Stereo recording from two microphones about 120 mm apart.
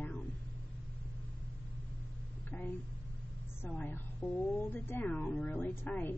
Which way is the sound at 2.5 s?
15° left (ahead or behind).